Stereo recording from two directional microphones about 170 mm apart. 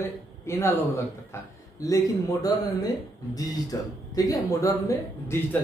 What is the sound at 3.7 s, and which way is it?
Speech, 20° left (ahead or behind).